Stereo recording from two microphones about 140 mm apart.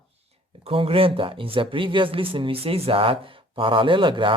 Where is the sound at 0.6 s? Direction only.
40° right (ahead or behind).